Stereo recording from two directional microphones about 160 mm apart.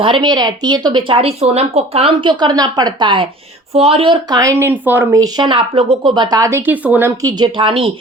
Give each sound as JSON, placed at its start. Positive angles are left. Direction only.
{"t": 0.0, "sound": "speech", "side_deg": -30}
{"t": 7.2, "sound": "speech", "side_deg": -25}